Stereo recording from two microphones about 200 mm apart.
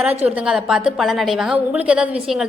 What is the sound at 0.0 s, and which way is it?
A woman's voice, 5° right (ahead or behind).